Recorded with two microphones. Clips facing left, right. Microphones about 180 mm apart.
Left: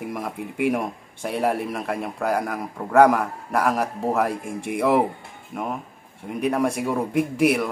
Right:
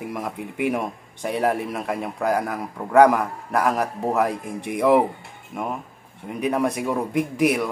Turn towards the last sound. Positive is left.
turn(degrees=5)  # may be behind; listen again after turning